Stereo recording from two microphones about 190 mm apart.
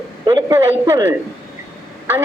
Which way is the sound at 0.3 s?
15° right (ahead or behind).